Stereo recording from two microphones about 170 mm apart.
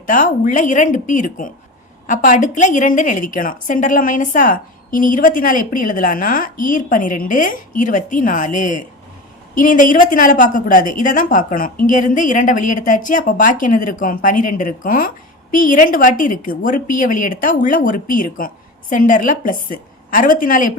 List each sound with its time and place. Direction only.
0.1 s a woman's voice: 50° left (ahead or behind)